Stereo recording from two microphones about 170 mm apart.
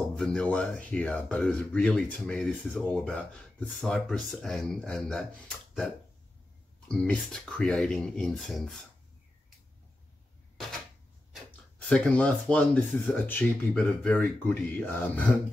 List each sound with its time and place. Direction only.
0.1 s speech: 5° left (ahead or behind)
6.9 s speech: 5° left (ahead or behind)
11.8 s speech: 5° left (ahead or behind)